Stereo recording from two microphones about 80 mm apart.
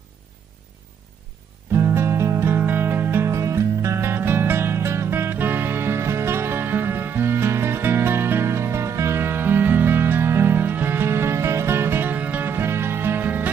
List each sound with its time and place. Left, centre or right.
2.0 s music: right